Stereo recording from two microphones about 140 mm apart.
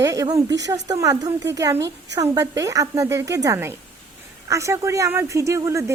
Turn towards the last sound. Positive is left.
turn(degrees=-20)  # may be behind; listen again after turning